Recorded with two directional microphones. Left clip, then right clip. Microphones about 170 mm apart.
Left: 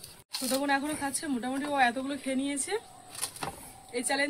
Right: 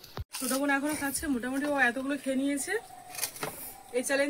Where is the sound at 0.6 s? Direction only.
40° left (ahead or behind).